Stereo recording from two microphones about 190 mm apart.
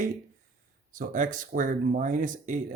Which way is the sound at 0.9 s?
45° right (ahead or behind).